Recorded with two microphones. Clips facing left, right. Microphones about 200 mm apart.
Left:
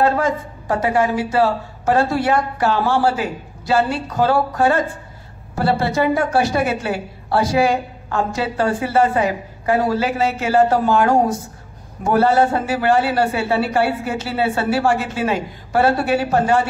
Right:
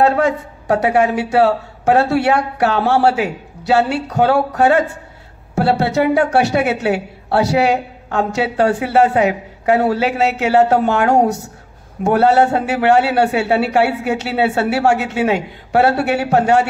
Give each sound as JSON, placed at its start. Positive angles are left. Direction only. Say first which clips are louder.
{"t": 0.0, "sound": "a woman's voice", "louder": "right 3 dB", "side_deg": -70}